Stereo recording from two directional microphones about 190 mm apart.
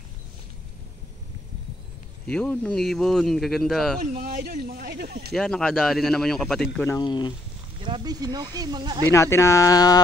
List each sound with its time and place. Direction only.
2.2 s speech: 5° left (ahead or behind)
4.0 s speech: 50° right (ahead or behind)
5.3 s speech: 5° left (ahead or behind)
6.9 s speech: 20° left (ahead or behind)
7.8 s speech: 25° right (ahead or behind)
9.1 s speech: 15° left (ahead or behind)